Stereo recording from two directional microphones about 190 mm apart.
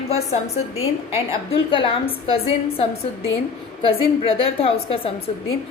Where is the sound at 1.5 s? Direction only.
25° left (ahead or behind).